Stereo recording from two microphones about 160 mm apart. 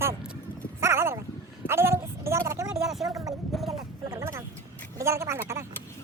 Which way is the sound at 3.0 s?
20° right (ahead or behind).